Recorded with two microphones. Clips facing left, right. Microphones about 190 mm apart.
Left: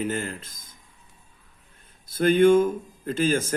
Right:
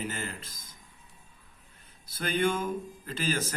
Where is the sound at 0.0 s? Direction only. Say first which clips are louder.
Left 8 dB; 50° left (ahead or behind).